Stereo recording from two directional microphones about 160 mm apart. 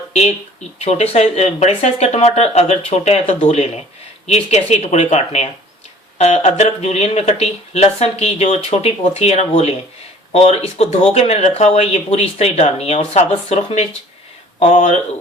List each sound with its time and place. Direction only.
0.8 s speech: 40° left (ahead or behind)